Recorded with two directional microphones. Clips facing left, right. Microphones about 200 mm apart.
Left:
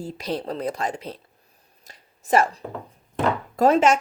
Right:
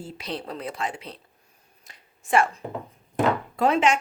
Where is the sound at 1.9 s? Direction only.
40° left (ahead or behind).